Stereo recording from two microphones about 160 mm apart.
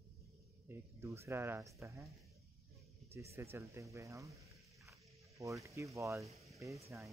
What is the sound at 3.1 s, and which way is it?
Speech, 15° right (ahead or behind).